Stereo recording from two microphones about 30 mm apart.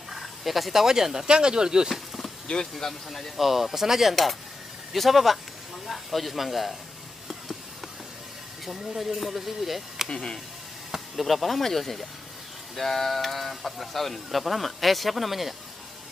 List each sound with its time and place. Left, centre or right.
0.1 s fowl: centre
0.8 s speech: centre
1.3 s speech: right
1.9 s insect: centre
2.9 s speech: centre
4.1 s speech: centre
7.2 s a sound: centre
8.6 s speech: centre
10.0 s speech: left
11.1 s speech: centre